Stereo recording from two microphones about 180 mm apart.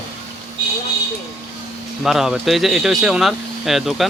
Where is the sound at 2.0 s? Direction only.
Centre (ahead or behind).